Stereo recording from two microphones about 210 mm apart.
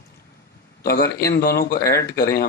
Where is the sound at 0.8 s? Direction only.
45° left (ahead or behind).